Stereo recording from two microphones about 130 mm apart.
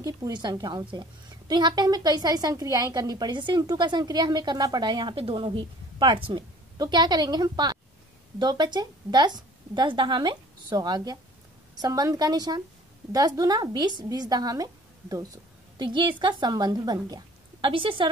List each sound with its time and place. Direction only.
0.0 s a woman's voice: 30° right (ahead or behind)
15.8 s a woman's voice: 40° right (ahead or behind)